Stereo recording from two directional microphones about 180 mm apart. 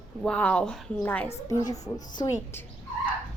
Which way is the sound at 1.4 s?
20° left (ahead or behind).